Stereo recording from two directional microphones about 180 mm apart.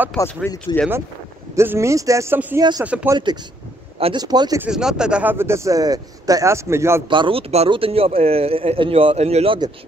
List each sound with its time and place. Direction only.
0.2 s speech: 20° left (ahead or behind)
1.5 s a man's voice: 15° right (ahead or behind)
2.8 s a man's voice: 10° right (ahead or behind)
4.0 s speech: 25° right (ahead or behind)
4.6 s a man's voice: 5° right (ahead or behind)
7.1 s speech: 30° right (ahead or behind)